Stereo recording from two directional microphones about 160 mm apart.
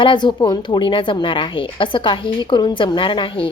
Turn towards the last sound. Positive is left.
turn(degrees=30)  # may be behind; listen again after turning